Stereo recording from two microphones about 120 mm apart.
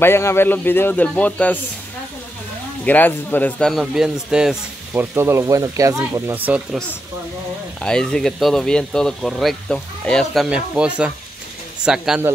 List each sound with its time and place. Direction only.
0.0 s speech: 20° left (ahead or behind)
2.8 s speech: 15° left (ahead or behind)
3.8 s speech: 5° right (ahead or behind)
4.9 s speech: 20° right (ahead or behind)
7.8 s speech: 5° left (ahead or behind)